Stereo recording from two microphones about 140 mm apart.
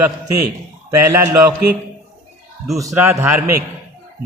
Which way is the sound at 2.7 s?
20° right (ahead or behind).